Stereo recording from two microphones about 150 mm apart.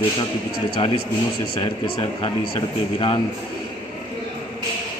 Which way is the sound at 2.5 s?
35° left (ahead or behind).